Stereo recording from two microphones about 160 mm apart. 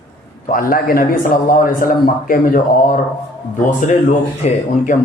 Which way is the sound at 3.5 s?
50° left (ahead or behind).